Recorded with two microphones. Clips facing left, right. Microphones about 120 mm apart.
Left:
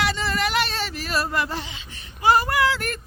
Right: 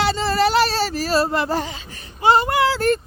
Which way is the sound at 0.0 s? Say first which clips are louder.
Right 6 dB; 30° right (ahead or behind).